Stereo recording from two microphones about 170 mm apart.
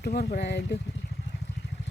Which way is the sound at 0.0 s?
70° left (ahead or behind).